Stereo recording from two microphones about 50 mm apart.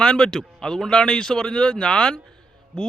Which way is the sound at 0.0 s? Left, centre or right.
Centre.